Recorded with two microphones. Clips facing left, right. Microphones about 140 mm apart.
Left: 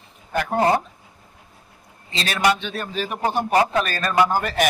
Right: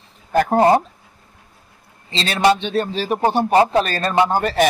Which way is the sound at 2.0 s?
25° right (ahead or behind).